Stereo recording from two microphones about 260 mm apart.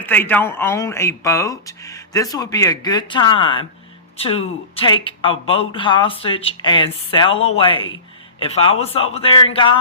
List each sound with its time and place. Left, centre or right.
0.0 s speech: centre